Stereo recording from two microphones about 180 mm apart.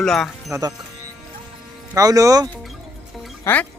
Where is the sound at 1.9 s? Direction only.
20° right (ahead or behind).